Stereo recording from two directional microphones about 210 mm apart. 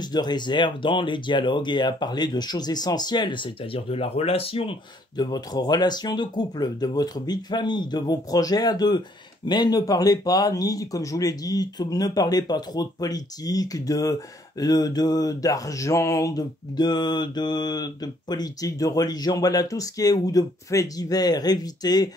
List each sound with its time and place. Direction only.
0.0 s speech: 20° left (ahead or behind)
9.5 s mantra: 20° left (ahead or behind)